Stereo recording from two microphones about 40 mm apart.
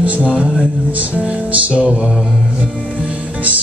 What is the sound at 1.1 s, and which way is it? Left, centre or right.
Music, right.